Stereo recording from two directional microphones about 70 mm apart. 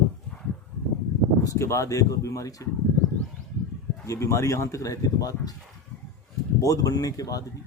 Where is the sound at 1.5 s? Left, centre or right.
Left.